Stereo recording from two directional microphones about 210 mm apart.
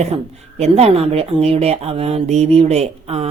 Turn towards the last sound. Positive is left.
turn(degrees=-30)  # may be behind; listen again after turning